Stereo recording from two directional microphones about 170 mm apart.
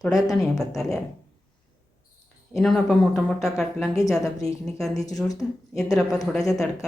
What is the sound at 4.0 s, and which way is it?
Speech, 20° left (ahead or behind).